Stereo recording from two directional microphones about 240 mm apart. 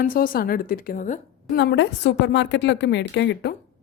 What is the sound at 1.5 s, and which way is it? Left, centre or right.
A woman's voice, left.